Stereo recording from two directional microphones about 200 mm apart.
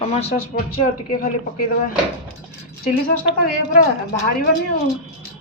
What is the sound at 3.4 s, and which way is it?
Speech, 50° left (ahead or behind).